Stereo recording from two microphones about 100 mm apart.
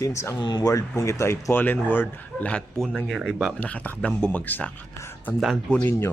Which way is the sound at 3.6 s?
15° left (ahead or behind).